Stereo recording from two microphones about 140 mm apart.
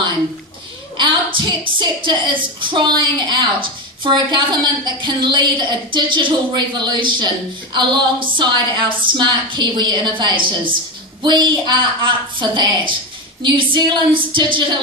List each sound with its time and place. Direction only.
0.9 s a woman's voice: 35° right (ahead or behind)